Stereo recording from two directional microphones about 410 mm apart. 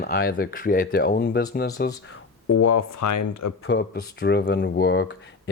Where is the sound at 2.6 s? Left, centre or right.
Left.